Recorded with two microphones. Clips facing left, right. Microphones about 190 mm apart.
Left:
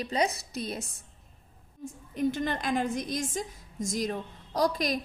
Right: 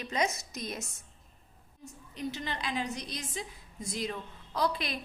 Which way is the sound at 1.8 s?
50° left (ahead or behind).